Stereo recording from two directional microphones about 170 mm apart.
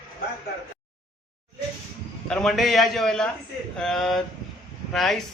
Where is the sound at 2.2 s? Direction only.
5° left (ahead or behind).